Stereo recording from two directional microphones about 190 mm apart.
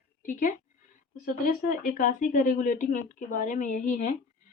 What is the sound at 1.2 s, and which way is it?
A woman's voice, 45° left (ahead or behind).